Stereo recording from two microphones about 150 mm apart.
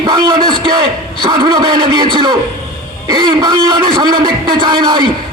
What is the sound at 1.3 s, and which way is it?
A man's voice, 30° right (ahead or behind).